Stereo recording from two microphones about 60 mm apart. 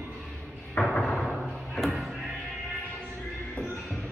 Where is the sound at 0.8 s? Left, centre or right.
Centre.